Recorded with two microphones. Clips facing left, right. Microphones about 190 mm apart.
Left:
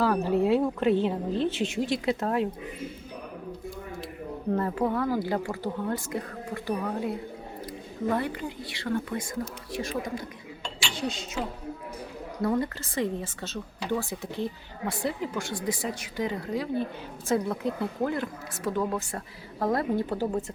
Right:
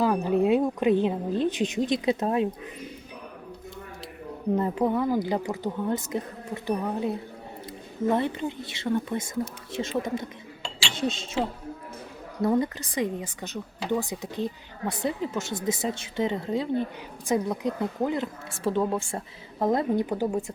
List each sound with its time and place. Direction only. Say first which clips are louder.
0.0 s speech: right 1 dB; 15° right (ahead or behind)
4.5 s speech: right 2 dB; 15° right (ahead or behind)